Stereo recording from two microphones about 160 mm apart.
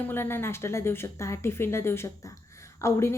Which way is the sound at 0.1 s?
15° left (ahead or behind).